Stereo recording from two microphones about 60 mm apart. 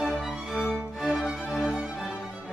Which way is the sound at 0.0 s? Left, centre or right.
Centre.